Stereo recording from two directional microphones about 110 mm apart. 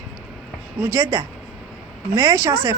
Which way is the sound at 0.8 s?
25° right (ahead or behind).